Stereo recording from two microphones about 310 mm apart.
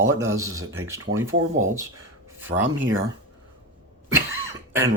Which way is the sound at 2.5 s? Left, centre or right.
Right.